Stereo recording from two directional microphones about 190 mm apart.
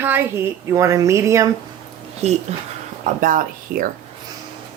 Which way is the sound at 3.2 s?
45° right (ahead or behind).